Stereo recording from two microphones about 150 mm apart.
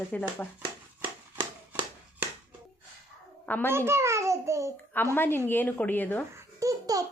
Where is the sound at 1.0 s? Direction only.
35° right (ahead or behind).